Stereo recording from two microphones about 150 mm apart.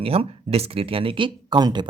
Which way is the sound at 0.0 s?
40° right (ahead or behind).